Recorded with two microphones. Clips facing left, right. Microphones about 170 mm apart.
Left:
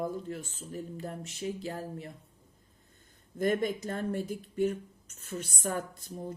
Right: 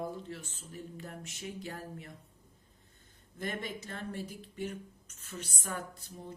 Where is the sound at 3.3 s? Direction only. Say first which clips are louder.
Left 10 dB; 45° left (ahead or behind).